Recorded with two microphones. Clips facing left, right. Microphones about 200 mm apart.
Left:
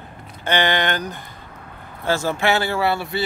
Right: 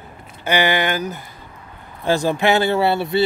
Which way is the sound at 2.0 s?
15° right (ahead or behind).